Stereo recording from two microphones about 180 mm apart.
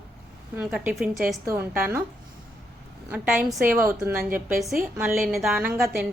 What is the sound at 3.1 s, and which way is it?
A woman's voice, 5° right (ahead or behind).